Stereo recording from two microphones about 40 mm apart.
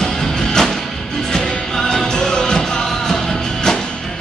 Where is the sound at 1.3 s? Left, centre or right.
Centre.